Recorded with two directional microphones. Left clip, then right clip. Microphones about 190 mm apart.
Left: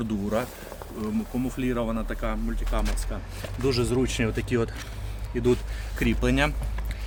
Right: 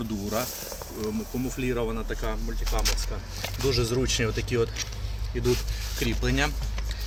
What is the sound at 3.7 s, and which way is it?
Speech, 25° left (ahead or behind).